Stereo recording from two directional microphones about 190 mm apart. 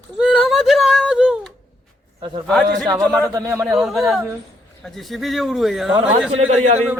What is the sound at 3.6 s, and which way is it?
Speech, centre (ahead or behind).